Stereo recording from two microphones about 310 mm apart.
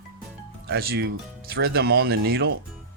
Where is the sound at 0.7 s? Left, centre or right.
Right.